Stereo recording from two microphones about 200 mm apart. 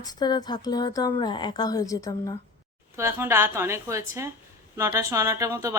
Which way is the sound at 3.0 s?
10° right (ahead or behind).